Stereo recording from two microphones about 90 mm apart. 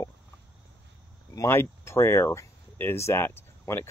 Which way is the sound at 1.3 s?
30° left (ahead or behind).